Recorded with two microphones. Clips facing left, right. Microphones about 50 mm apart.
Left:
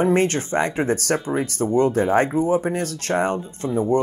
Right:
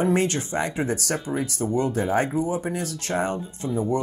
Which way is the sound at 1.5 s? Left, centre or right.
Left.